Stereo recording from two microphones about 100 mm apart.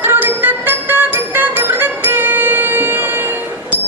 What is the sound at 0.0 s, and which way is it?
Music, 20° right (ahead or behind).